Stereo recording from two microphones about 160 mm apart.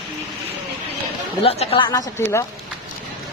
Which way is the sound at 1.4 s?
40° left (ahead or behind).